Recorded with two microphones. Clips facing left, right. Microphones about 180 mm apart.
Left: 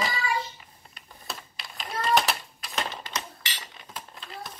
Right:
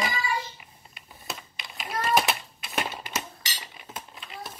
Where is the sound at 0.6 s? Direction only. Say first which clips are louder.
Even; 10° right (ahead or behind).